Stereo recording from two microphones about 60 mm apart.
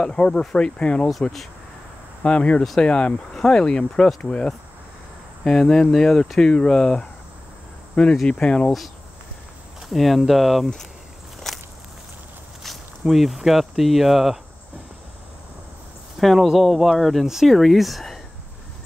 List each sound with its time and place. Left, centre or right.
0.0 s speech: centre
2.2 s speech: centre
9.8 s speech: centre
11.3 s walk: centre
12.6 s speech: centre
16.2 s speech: centre